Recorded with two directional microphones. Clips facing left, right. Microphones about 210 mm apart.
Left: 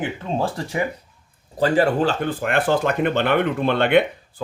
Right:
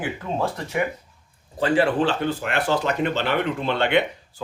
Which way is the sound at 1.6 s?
40° left (ahead or behind).